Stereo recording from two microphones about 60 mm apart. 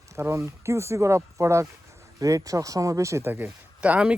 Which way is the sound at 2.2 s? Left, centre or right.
Right.